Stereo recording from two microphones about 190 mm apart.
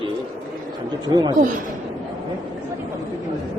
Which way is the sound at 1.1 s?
20° right (ahead or behind).